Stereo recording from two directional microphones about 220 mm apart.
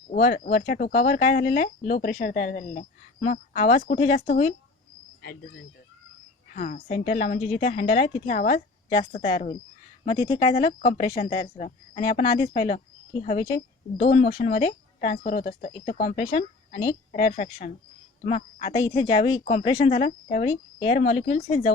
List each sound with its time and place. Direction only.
0.1 s speech: 40° left (ahead or behind)
5.2 s a woman's voice: 45° left (ahead or behind); by 10.5 s 20° left (ahead or behind)
10.5 s speech: 30° left (ahead or behind)
13.2 s a woman's voice: 25° left (ahead or behind)
14.3 s a man's voice: 40° left (ahead or behind)
20.5 s a woman's voice: 25° left (ahead or behind)